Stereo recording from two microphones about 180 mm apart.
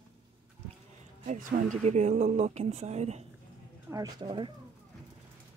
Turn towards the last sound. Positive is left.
turn(degrees=-20)  # may be behind; listen again after turning